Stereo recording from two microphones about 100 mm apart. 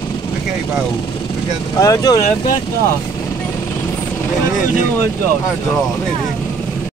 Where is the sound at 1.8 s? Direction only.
35° left (ahead or behind).